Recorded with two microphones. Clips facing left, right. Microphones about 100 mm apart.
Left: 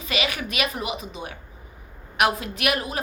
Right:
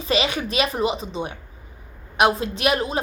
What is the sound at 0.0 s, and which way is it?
A woman's voice, 30° right (ahead or behind).